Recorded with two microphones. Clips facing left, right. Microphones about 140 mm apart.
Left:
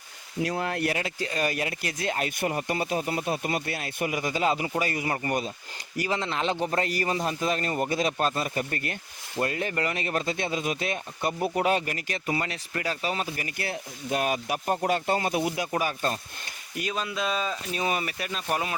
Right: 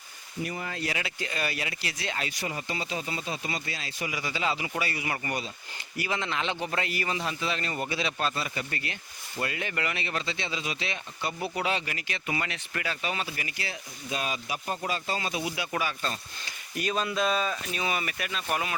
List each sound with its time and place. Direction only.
0.4 s speech: 70° left (ahead or behind)
0.9 s speech: 40° left (ahead or behind)
16.8 s speech: 5° left (ahead or behind)
17.2 s speech: 15° left (ahead or behind)
17.7 s speech: 35° left (ahead or behind)